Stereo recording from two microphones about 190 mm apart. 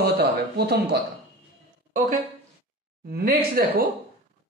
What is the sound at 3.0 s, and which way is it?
Speech, 55° right (ahead or behind).